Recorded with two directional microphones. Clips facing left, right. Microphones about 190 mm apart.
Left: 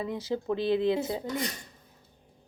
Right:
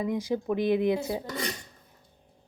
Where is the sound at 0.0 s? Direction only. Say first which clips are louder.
Right 3 dB; 15° right (ahead or behind).